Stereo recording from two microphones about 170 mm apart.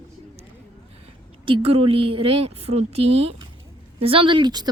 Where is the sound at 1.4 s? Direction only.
30° right (ahead or behind).